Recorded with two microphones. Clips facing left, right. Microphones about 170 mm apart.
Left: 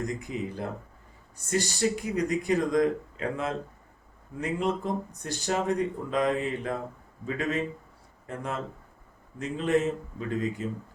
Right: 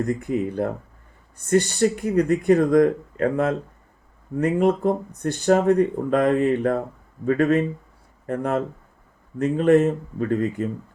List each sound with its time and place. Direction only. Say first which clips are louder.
0.0 s speech: right 9 dB; 60° right (ahead or behind)